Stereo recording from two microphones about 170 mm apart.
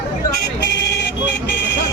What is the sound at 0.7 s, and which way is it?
Vehicle, 80° left.